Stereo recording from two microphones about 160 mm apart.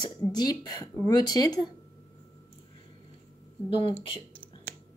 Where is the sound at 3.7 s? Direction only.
35° left (ahead or behind).